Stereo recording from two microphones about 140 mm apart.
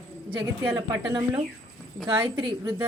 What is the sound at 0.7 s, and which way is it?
Speech, 30° right (ahead or behind).